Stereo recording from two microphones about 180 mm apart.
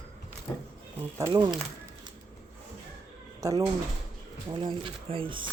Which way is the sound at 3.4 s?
20° right (ahead or behind).